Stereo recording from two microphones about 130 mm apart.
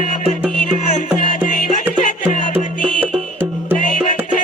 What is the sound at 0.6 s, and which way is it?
Music, 90° left.